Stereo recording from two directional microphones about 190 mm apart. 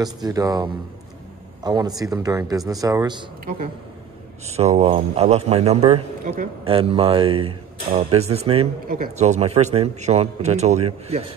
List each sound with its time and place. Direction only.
0.0 s speech: 20° right (ahead or behind)
4.5 s a man's voice: 35° right (ahead or behind)
6.2 s a man's voice: 45° right (ahead or behind)
6.6 s speech: 30° right (ahead or behind)
8.8 s a man's voice: 45° right (ahead or behind)